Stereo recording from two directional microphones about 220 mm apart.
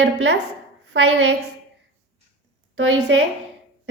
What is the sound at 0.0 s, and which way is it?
A woman's voice, 55° right (ahead or behind).